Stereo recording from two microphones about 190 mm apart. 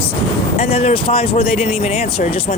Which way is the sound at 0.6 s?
35° left (ahead or behind).